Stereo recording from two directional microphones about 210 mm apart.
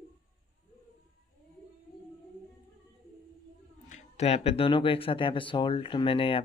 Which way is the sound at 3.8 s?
35° left (ahead or behind).